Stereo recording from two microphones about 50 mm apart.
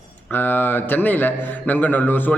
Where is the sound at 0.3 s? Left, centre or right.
Left.